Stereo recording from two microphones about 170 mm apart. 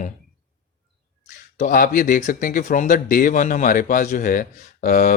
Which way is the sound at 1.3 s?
50° left (ahead or behind).